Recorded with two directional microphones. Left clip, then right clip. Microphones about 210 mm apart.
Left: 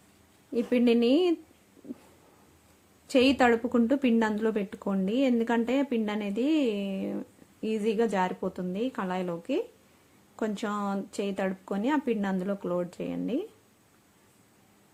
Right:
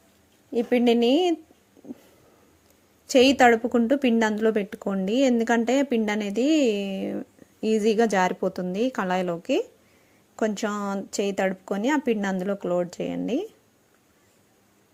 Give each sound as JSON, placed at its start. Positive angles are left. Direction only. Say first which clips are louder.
{"t": 0.5, "sound": "a woman's voice", "louder": "right 4 dB", "side_deg": -10}
{"t": 3.1, "sound": "a woman's voice", "louder": "right 6 dB", "side_deg": -10}